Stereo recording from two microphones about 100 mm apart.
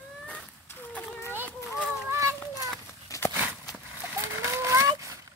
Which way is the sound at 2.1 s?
30° right (ahead or behind).